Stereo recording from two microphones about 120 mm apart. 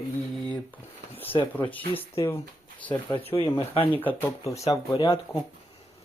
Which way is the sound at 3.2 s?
50° left (ahead or behind).